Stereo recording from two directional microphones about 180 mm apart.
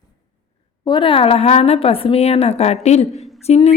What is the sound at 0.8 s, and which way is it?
A woman's voice, 25° left (ahead or behind).